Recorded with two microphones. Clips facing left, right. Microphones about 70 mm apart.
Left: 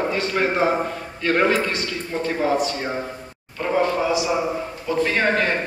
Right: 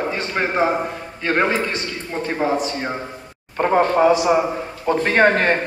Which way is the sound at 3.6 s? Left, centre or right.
Right.